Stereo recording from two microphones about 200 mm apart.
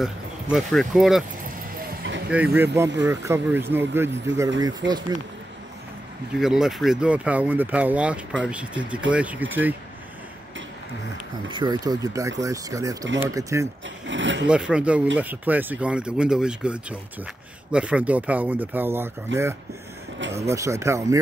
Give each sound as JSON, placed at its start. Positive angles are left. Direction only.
{"t": 0.0, "sound": "speech", "side_deg": 0}
{"t": 1.9, "sound": "music", "side_deg": -65}
{"t": 2.3, "sound": "speech", "side_deg": -10}
{"t": 6.4, "sound": "speech", "side_deg": 0}
{"t": 11.5, "sound": "speech", "side_deg": -20}
{"t": 14.0, "sound": "speech", "side_deg": -65}
{"t": 14.5, "sound": "speech", "side_deg": -5}
{"t": 20.3, "sound": "speech", "side_deg": -15}